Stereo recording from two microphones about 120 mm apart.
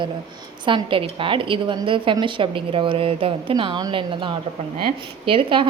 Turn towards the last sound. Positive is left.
turn(degrees=-45)  # may be behind; listen again after turning